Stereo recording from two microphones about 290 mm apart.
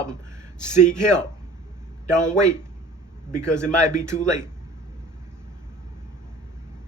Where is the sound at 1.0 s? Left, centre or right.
Centre.